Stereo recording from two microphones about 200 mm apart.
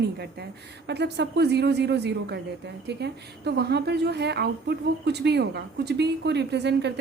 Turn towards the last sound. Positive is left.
turn(degrees=-60)  # may be behind; listen again after turning